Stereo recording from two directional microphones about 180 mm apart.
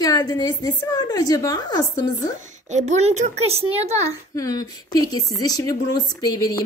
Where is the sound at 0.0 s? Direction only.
20° left (ahead or behind).